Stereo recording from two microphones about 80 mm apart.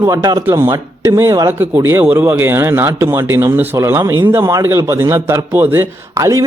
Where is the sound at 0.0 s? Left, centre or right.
Right.